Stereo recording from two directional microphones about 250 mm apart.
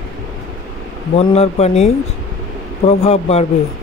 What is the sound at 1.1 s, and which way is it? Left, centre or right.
Speech, left.